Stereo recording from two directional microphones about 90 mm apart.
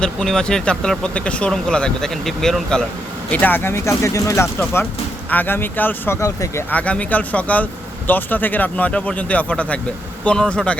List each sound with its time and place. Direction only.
0.0 s speech: 5° left (ahead or behind)
3.3 s speech: 20° left (ahead or behind)
6.1 s speech: 35° left (ahead or behind)
6.7 s speech: 15° left (ahead or behind)